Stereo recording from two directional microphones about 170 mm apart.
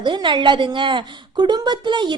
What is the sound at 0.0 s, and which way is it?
A woman's voice, 25° right (ahead or behind).